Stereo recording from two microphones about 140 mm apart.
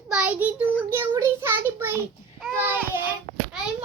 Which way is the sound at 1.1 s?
20° right (ahead or behind).